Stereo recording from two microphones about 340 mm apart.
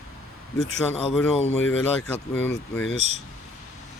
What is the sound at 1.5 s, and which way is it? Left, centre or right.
Speech, left.